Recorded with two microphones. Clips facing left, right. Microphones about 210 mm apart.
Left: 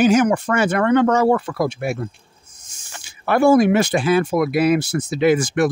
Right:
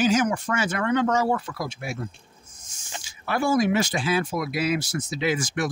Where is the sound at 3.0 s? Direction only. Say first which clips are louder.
Left 10 dB; 60° left (ahead or behind).